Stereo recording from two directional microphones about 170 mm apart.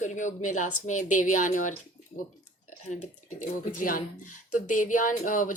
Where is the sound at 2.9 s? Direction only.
45° left (ahead or behind).